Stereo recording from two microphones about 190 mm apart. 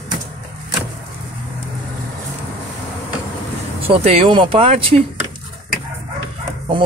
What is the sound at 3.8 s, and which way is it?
Speech, 30° right (ahead or behind).